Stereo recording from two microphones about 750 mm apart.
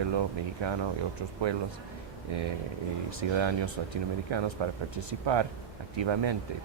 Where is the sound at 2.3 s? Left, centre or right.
Right.